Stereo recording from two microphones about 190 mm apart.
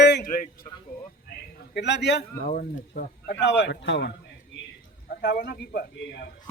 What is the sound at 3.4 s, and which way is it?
Speech, 70° left (ahead or behind).